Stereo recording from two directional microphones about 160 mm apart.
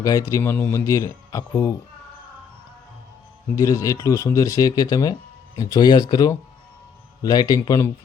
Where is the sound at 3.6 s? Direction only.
20° left (ahead or behind).